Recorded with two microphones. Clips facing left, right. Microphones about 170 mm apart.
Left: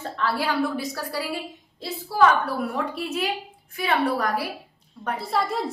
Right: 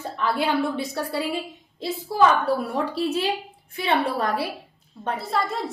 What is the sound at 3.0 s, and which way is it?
A woman's voice, 30° right (ahead or behind).